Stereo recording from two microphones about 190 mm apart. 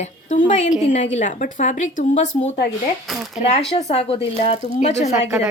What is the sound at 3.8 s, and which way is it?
A woman's voice, 35° left (ahead or behind).